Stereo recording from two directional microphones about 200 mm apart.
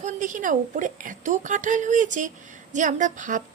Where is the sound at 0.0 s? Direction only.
40° right (ahead or behind).